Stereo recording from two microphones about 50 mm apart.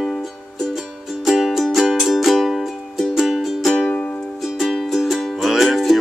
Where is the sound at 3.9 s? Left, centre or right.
Left.